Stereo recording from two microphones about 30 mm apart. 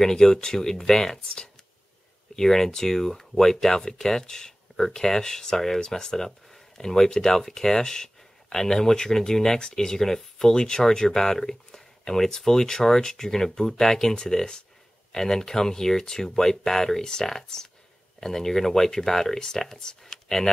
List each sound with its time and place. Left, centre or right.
0.0 s speech: centre
2.3 s speech: centre